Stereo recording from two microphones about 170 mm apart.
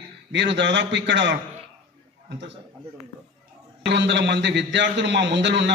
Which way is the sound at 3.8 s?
90° right.